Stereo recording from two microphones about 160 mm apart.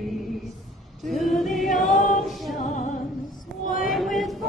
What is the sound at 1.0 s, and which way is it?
Choir, centre (ahead or behind).